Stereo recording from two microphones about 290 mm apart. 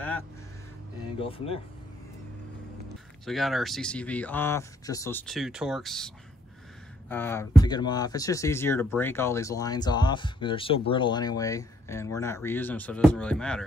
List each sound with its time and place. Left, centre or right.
1.1 s speech: centre
3.3 s speech: centre